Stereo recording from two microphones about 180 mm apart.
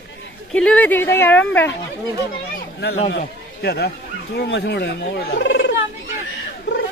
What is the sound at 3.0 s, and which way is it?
A man's voice, 65° left (ahead or behind).